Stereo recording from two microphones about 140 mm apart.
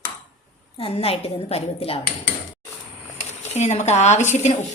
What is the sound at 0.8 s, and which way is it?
Speech, 45° left (ahead or behind).